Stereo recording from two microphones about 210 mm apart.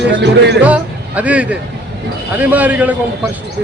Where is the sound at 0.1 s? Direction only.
55° right (ahead or behind).